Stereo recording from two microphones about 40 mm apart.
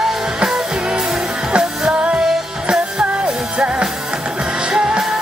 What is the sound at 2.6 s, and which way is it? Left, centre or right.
Music, right.